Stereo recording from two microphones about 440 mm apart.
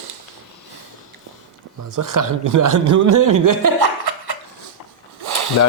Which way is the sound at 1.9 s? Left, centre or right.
Right.